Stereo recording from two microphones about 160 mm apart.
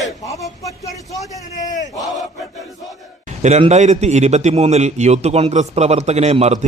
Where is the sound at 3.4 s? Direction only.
45° right (ahead or behind).